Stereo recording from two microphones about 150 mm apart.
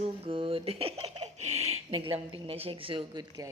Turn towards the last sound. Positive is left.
turn(degrees=-30)  # may be behind; listen again after turning